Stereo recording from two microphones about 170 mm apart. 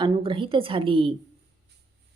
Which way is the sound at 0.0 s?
30° right (ahead or behind).